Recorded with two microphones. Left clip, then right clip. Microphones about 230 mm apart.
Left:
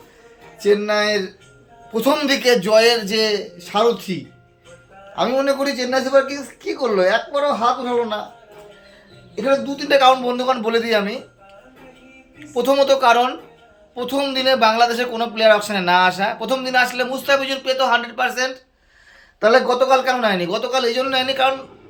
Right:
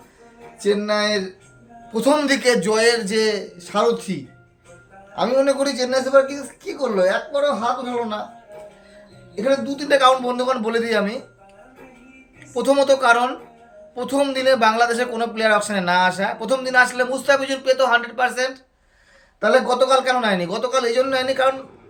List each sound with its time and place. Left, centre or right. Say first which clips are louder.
0.6 s a man's voice: left 3 dB; centre
9.3 s a man's voice: left 1 dB; centre
12.5 s a man's voice: left 1 dB; centre